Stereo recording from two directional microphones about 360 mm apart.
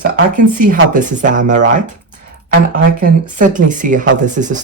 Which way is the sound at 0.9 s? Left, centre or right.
Right.